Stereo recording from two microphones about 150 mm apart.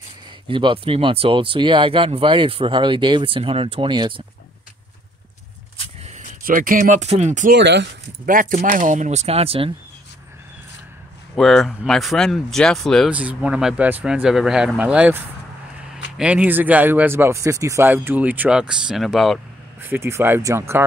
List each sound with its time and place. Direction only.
0.5 s speech: 35° right (ahead or behind)
6.0 s speech: 60° right (ahead or behind)
8.3 s speech: 65° right (ahead or behind)
8.5 s speech: 55° right (ahead or behind)
11.3 s speech: centre (ahead or behind)
13.1 s speech: 10° right (ahead or behind)
19.8 s speech: 15° right (ahead or behind)